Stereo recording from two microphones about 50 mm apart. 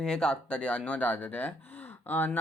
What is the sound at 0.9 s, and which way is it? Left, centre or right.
Speech, left.